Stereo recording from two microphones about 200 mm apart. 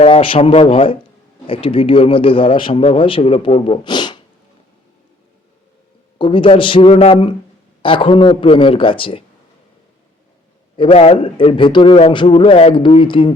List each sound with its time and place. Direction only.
0.0 s speech: 25° left (ahead or behind)
6.1 s speech: 25° left (ahead or behind)
10.8 s speech: 30° left (ahead or behind)